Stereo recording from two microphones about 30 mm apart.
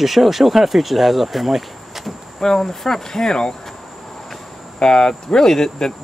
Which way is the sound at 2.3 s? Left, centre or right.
Centre.